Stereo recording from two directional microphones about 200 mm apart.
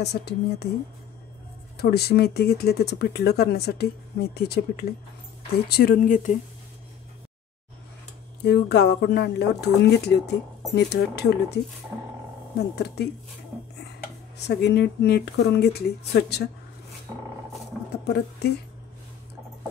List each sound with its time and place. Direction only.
0.0 s speech: 55° left (ahead or behind)
1.8 s speech: 55° left (ahead or behind)
8.5 s speech: 55° left (ahead or behind)
14.4 s speech: 55° left (ahead or behind)